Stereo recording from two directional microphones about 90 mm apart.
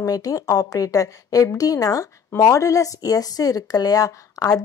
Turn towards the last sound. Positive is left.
turn(degrees=40)  # may be behind; listen again after turning